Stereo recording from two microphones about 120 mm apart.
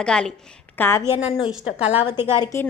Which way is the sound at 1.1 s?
60° left (ahead or behind).